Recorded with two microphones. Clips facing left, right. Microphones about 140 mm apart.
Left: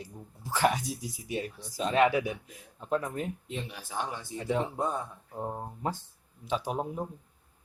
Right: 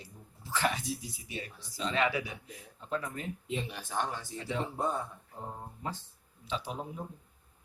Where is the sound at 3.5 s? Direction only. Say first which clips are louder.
Right 2 dB; centre (ahead or behind).